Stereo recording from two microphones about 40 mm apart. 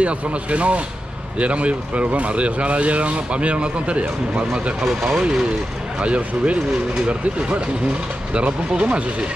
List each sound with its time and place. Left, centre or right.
0.0 s speech: right
4.8 s speech: centre
5.9 s speech: right